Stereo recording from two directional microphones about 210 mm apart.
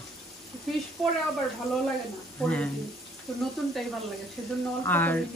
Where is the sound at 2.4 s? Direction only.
5° left (ahead or behind).